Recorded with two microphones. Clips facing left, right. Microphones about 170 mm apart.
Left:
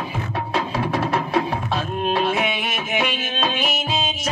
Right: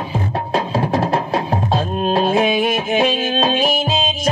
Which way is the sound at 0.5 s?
30° right (ahead or behind).